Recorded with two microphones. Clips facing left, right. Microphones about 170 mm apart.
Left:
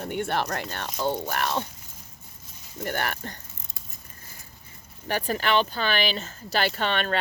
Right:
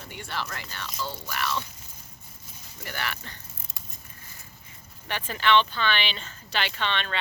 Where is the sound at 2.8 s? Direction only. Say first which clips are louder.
Left 6 dB; 50° left (ahead or behind).